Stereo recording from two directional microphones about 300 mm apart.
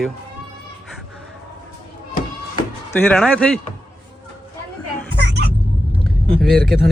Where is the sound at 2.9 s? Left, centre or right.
Centre.